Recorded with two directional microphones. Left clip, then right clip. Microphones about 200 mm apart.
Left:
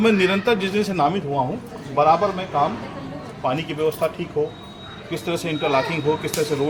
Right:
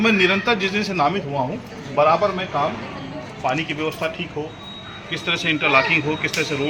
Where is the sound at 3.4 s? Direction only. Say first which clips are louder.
Left 1 dB; 70° left (ahead or behind).